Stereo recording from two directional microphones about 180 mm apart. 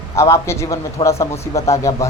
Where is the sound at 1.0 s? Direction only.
30° left (ahead or behind).